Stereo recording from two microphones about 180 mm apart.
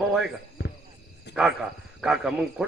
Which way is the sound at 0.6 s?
65° left (ahead or behind).